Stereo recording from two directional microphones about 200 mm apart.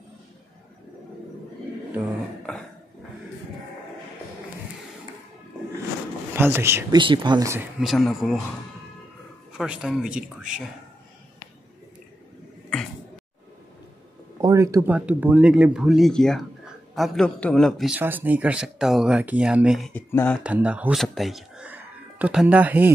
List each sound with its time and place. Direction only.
6.3 s speech: 10° right (ahead or behind)
7.0 s speech: 25° right (ahead or behind)
7.8 s a man's voice: centre (ahead or behind)
9.5 s a man's voice: 5° right (ahead or behind)
14.4 s a man's voice: 15° right (ahead or behind); by 20.3 s 10° left (ahead or behind)
20.4 s speech: 5° right (ahead or behind)